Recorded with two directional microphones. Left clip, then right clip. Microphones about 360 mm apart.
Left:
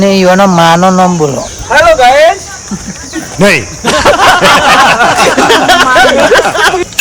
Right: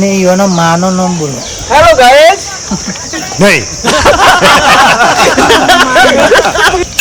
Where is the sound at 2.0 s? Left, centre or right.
Right.